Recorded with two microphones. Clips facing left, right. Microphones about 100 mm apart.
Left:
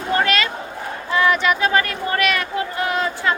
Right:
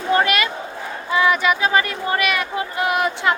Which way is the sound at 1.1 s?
10° right (ahead or behind).